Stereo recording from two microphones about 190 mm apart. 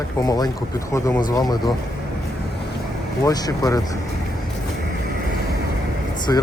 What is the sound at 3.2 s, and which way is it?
Speech, 20° left (ahead or behind).